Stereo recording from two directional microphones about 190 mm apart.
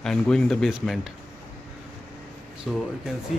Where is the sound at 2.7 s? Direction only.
Centre (ahead or behind).